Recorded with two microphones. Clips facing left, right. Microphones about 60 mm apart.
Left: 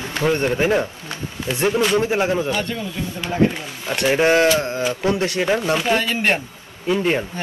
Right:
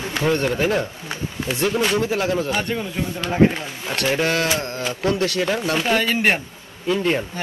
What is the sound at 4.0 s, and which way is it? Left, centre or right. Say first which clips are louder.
Speech: left 5 dB; left.